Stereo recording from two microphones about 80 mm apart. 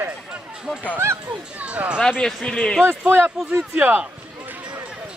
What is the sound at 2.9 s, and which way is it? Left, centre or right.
Speech, right.